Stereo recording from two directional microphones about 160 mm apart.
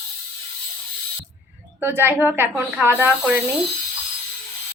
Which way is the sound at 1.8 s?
15° right (ahead or behind).